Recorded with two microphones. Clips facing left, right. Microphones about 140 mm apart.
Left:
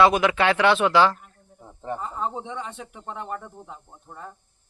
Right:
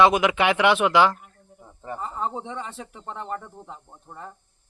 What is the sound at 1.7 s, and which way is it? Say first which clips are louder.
Cricket: left 4 dB; 20° left (ahead or behind).